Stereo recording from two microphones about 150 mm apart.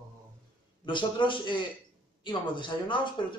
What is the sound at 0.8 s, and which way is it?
A man's voice, 30° left (ahead or behind).